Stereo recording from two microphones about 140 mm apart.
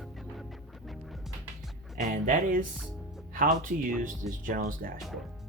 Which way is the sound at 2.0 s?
70° right (ahead or behind).